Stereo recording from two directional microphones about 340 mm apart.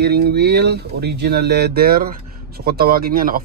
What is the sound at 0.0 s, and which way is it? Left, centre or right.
Speech, right.